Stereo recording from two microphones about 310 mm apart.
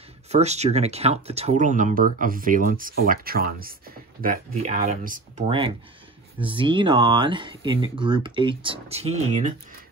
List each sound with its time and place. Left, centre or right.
0.3 s speech: right